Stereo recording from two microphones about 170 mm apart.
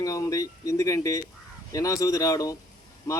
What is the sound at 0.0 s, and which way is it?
Speech, 20° left (ahead or behind).